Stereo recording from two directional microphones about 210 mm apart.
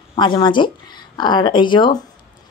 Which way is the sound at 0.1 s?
20° left (ahead or behind).